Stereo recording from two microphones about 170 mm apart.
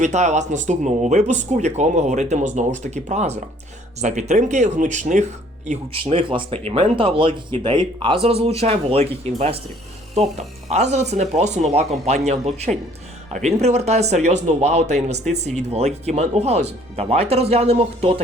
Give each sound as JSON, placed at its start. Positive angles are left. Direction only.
{"t": 0.0, "sound": "speech", "side_deg": -45}